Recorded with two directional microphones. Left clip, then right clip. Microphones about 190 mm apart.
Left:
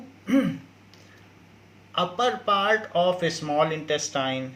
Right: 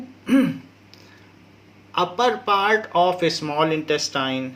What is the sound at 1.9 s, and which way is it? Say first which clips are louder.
Speech: right 4 dB; 45° right (ahead or behind).